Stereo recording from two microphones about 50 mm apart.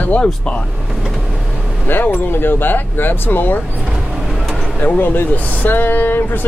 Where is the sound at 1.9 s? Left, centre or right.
Left.